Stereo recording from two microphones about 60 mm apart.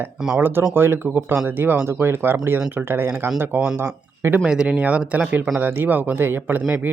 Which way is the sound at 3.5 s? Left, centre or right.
Right.